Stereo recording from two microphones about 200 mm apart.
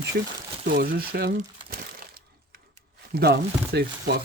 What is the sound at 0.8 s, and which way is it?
Speech, 50° right (ahead or behind).